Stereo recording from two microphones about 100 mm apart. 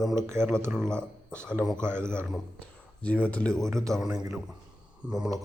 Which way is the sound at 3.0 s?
15° left (ahead or behind).